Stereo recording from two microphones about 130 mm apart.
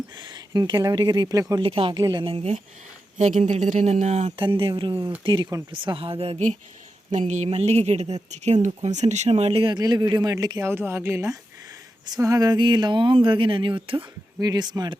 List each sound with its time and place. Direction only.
0.2 s speech: 35° right (ahead or behind)
1.6 s a woman's voice: 45° right (ahead or behind)
3.2 s speech: 65° right (ahead or behind)
4.4 s a woman's voice: 40° right (ahead or behind)
7.1 s speech: 65° right (ahead or behind); by 9.7 s 45° right (ahead or behind)
9.7 s speech: 30° right (ahead or behind)
14.3 s speech: 30° right (ahead or behind)